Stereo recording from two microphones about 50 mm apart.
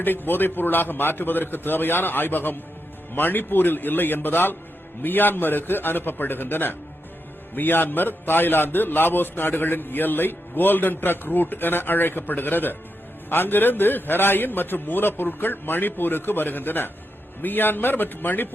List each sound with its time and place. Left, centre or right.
0.0 s a man's voice: left